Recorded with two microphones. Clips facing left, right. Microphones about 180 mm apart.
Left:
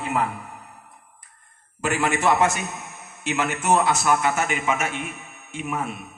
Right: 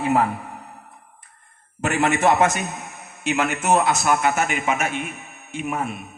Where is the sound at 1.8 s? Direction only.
20° right (ahead or behind).